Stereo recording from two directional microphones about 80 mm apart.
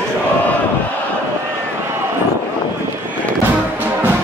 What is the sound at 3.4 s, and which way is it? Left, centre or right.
Music, right.